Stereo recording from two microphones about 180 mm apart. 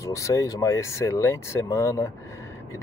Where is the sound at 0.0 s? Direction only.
15° left (ahead or behind).